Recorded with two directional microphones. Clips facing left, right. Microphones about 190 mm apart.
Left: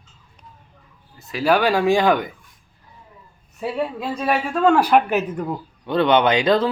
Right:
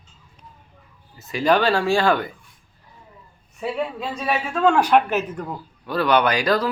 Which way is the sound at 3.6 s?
Centre (ahead or behind).